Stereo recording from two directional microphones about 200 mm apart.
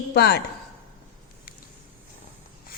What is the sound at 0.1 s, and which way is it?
Speech, 55° left (ahead or behind).